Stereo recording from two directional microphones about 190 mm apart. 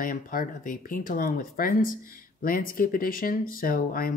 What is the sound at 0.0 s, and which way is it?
Speech, 45° left (ahead or behind).